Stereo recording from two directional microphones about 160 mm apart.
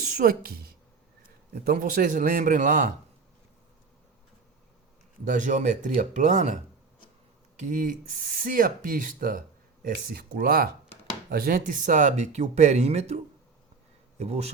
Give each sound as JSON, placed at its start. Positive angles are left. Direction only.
{"t": 0.1, "sound": "a woman's voice", "side_deg": -65}
{"t": 1.7, "sound": "speech", "side_deg": -55}
{"t": 5.2, "sound": "speech", "side_deg": -50}
{"t": 7.7, "sound": "speech", "side_deg": -55}
{"t": 10.1, "sound": "speech", "side_deg": -70}
{"t": 14.2, "sound": "speech", "side_deg": -40}